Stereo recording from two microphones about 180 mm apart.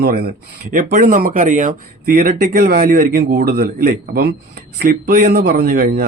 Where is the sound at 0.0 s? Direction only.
60° right (ahead or behind).